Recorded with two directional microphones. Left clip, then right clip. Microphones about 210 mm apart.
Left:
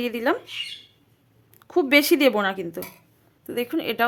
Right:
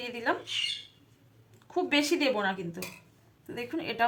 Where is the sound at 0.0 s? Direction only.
55° left (ahead or behind).